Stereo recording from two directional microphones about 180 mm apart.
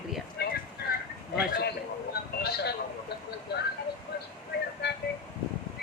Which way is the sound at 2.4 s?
65° left (ahead or behind).